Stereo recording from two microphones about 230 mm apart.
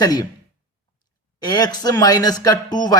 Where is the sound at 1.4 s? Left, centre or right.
Centre.